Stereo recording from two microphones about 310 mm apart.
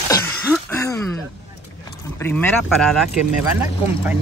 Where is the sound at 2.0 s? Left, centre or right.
Centre.